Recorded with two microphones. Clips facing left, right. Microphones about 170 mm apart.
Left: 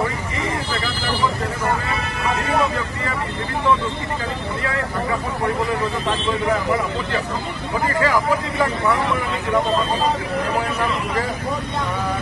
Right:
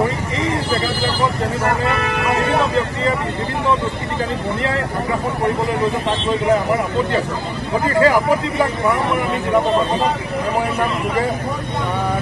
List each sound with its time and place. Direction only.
1.6 s vehicle: 70° right (ahead or behind)
7.9 s speech: 25° right (ahead or behind)